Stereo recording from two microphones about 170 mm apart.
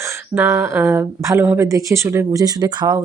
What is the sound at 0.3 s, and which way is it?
Speech, 15° right (ahead or behind).